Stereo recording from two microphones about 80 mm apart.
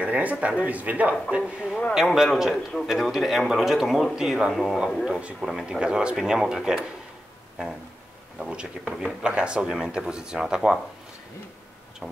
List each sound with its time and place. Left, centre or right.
0.0 s a man's voice: centre
1.4 s speech: centre
2.5 s a man's voice: centre
2.9 s speech: centre
8.4 s speech: centre